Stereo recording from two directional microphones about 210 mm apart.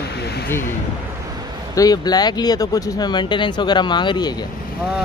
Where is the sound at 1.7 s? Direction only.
20° left (ahead or behind).